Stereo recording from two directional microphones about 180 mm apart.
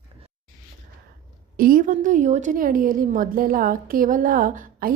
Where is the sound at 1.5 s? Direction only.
50° right (ahead or behind).